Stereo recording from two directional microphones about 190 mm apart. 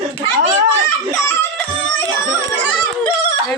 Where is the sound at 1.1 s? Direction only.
5° left (ahead or behind).